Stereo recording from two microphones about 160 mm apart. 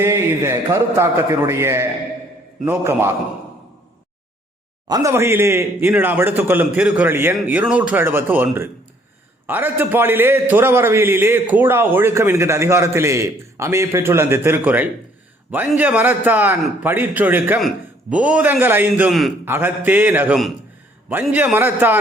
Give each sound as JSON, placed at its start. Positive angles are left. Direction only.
{"t": 0.0, "sound": "a man's voice", "side_deg": -15}
{"t": 4.9, "sound": "a man's voice", "side_deg": -20}